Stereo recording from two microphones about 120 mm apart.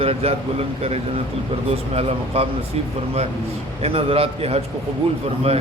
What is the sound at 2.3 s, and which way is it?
Speech, 55° right (ahead or behind).